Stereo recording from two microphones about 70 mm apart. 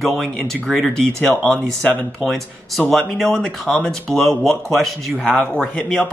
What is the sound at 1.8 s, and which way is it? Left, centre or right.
Speech, left.